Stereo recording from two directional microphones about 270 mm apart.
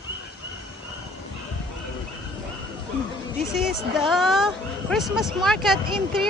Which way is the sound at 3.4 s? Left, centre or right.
Centre.